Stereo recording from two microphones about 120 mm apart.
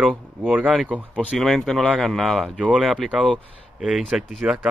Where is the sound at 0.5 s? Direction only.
10° right (ahead or behind).